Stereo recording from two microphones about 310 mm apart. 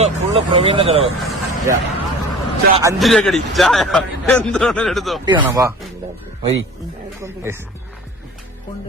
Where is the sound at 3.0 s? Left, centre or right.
Centre.